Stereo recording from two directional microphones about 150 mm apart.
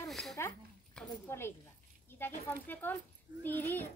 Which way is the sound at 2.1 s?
15° left (ahead or behind).